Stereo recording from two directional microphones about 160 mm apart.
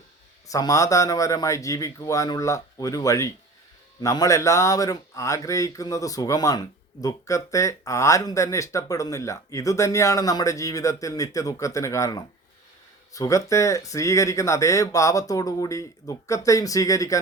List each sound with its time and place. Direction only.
0.4 s speech: 20° left (ahead or behind)